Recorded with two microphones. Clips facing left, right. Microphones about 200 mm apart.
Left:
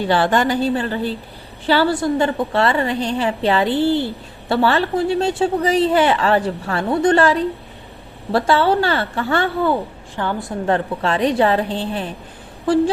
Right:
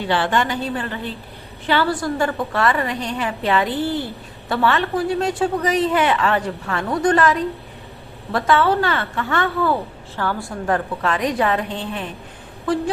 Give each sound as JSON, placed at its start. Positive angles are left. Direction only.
{"t": 0.1, "sound": "a woman's voice", "side_deg": 40}